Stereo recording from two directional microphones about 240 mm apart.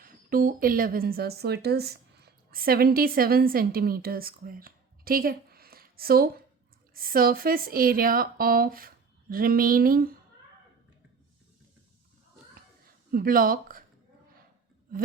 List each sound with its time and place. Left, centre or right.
0.0 s speech: right
13.1 s speech: right